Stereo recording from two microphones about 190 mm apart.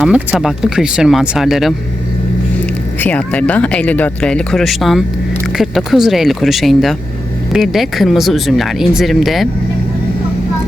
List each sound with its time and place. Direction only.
0.0 s speech: 5° right (ahead or behind)
3.0 s speech: 5° left (ahead or behind)